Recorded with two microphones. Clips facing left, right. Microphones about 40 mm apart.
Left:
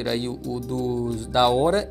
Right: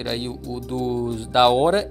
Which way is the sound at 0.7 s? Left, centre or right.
Right.